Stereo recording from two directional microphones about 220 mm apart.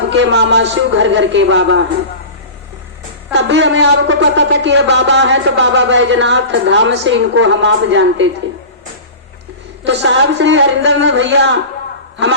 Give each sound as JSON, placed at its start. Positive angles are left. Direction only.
{"t": 0.1, "sound": "speech", "side_deg": -55}
{"t": 3.3, "sound": "speech", "side_deg": -55}
{"t": 9.8, "sound": "speech", "side_deg": -55}